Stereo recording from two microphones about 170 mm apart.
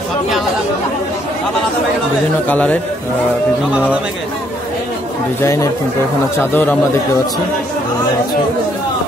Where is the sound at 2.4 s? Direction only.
10° left (ahead or behind).